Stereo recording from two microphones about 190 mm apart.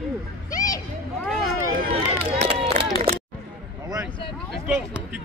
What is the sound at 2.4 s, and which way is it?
Run, 30° right (ahead or behind).